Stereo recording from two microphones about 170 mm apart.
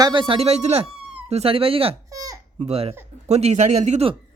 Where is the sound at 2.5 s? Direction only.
40° right (ahead or behind).